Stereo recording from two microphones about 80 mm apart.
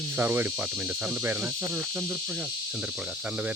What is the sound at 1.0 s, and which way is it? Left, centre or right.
Speech, right.